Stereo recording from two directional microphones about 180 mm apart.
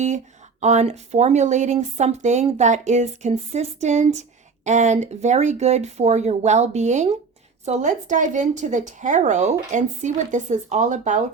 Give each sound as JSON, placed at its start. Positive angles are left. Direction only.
{"t": 0.6, "sound": "speech", "side_deg": -40}